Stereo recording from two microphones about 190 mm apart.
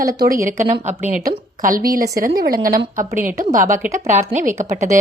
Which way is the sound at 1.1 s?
45° right (ahead or behind).